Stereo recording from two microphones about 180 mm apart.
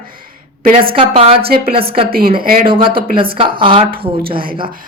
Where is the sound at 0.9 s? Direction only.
30° right (ahead or behind).